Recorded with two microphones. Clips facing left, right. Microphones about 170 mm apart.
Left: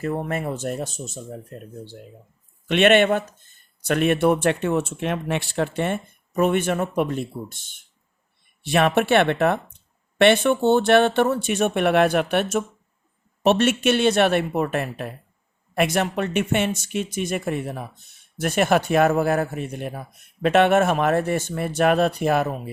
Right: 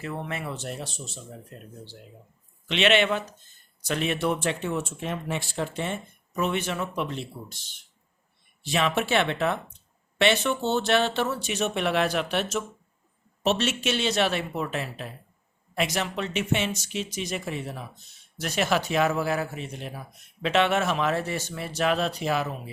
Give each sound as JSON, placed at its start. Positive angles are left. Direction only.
{"t": 0.0, "sound": "speech", "side_deg": 45}